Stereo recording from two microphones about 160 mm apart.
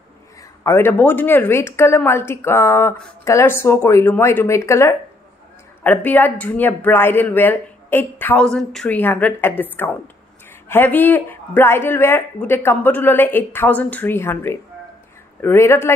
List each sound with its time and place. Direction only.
0.7 s speech: 15° left (ahead or behind)